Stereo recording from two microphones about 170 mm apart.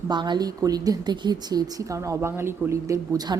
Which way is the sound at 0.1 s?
25° right (ahead or behind).